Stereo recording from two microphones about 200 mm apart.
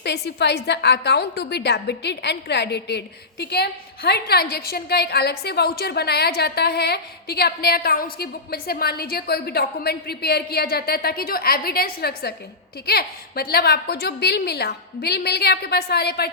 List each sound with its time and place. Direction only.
0.0 s a woman's voice: 55° left (ahead or behind)